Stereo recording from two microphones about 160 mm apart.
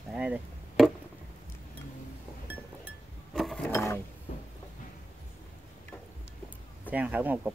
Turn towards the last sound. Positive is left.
turn(degrees=-10)  # may be behind; listen again after turning